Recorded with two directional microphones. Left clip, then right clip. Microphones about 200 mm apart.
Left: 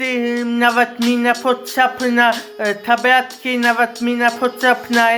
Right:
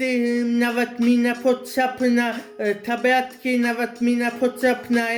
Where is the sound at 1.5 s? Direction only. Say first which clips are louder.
Left 3 dB; 10° right (ahead or behind).